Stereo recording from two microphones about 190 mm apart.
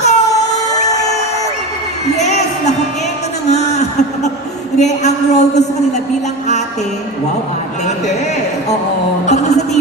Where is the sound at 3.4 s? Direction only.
35° left (ahead or behind).